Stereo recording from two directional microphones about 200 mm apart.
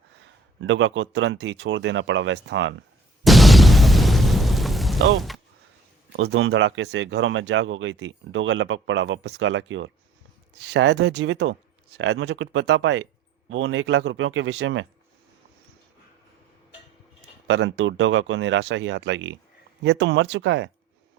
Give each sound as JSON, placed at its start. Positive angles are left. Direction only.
{"t": 0.6, "sound": "speech", "side_deg": -65}
{"t": 3.2, "sound": "boom", "side_deg": 0}
{"t": 6.1, "sound": "speech", "side_deg": -70}
{"t": 17.5, "sound": "speech", "side_deg": -70}